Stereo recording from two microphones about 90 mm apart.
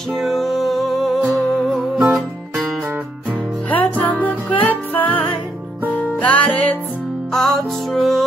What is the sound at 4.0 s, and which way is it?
Music, 20° left (ahead or behind).